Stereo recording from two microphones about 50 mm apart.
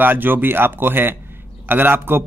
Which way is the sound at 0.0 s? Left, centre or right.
Right.